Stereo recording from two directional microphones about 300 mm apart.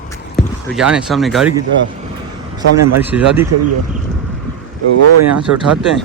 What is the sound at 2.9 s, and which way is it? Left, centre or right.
Speech, centre.